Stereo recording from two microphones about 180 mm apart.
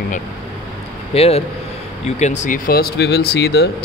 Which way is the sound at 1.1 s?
35° left (ahead or behind).